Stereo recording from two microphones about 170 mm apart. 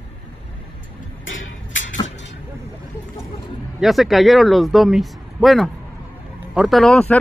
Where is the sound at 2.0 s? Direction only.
90° left.